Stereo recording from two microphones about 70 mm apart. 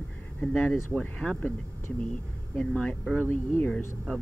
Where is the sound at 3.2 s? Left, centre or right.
Left.